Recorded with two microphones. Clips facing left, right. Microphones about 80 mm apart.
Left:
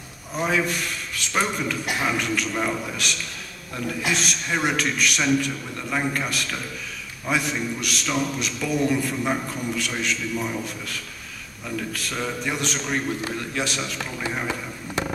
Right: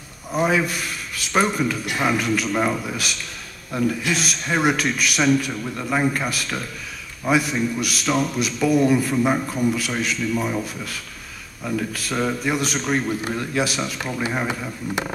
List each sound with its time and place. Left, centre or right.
0.4 s a man's voice: centre
5.5 s a man's voice: centre
11.9 s a man's voice: centre
14.1 s a man's voice: centre